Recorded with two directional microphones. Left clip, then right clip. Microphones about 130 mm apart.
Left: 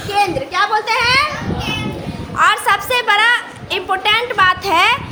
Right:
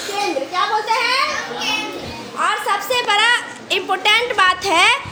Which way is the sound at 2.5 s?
20° right (ahead or behind).